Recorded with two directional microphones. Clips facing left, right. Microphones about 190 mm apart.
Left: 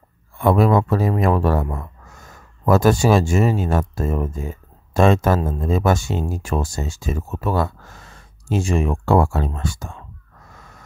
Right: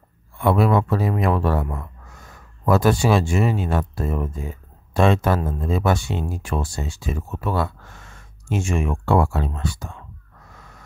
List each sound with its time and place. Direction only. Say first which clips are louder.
0.4 s speech: left 2 dB; 40° left (ahead or behind)